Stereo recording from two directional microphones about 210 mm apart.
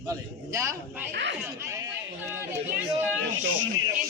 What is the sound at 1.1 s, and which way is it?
Speech, 55° right (ahead or behind).